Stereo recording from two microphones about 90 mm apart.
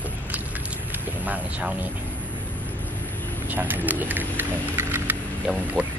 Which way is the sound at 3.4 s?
20° right (ahead or behind).